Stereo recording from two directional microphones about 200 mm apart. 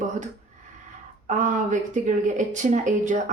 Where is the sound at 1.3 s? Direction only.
40° right (ahead or behind).